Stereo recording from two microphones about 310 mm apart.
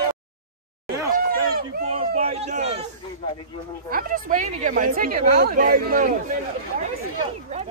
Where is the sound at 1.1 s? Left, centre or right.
Right.